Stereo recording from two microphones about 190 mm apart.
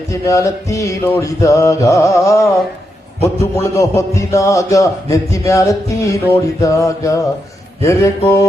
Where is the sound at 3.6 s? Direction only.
15° left (ahead or behind).